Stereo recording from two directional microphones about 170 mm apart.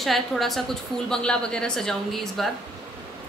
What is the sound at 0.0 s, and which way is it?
A woman's voice, centre (ahead or behind).